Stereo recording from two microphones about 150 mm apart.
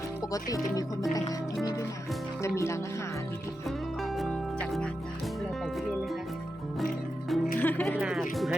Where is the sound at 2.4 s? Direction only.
20° left (ahead or behind).